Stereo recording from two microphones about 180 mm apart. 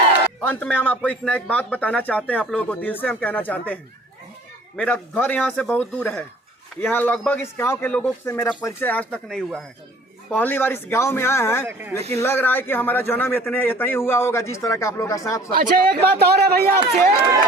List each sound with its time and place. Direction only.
0.4 s speech: 10° left (ahead or behind)
4.8 s speech: 10° left (ahead or behind)
11.6 s speech: 10° right (ahead or behind)
12.1 s speech: 10° left (ahead or behind)
15.5 s speech: 55° right (ahead or behind)